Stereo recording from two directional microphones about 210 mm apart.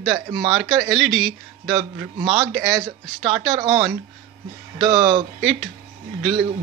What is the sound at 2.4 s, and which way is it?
Speech, centre (ahead or behind).